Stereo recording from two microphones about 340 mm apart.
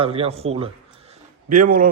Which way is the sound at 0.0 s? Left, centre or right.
Centre.